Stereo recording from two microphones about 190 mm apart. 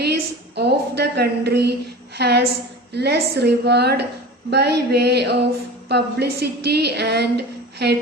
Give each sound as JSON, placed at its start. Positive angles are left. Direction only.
{"t": 0.0, "sound": "a woman's voice", "side_deg": -60}